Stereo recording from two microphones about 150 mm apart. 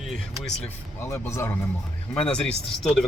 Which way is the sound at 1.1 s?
20° left (ahead or behind).